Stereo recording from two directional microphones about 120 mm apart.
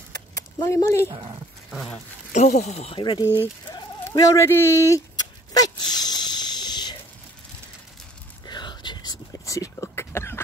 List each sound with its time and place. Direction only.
0.7 s speech: 25° left (ahead or behind)
1.7 s speech: 5° left (ahead or behind)
2.3 s speech: 75° left (ahead or behind)
3.0 s speech: 40° left (ahead or behind)
5.5 s dog: 35° left (ahead or behind)
8.5 s whispering: 40° left (ahead or behind); by 10.4 s 20° left (ahead or behind)